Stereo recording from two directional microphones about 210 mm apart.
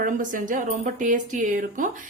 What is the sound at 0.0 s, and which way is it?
A woman's voice, 40° right (ahead or behind).